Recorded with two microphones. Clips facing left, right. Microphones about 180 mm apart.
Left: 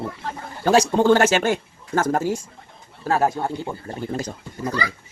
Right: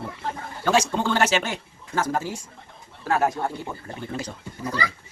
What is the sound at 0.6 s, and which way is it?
Speech, 40° left (ahead or behind).